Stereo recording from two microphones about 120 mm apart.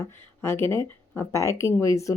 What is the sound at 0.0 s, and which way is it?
Speech, 20° left (ahead or behind).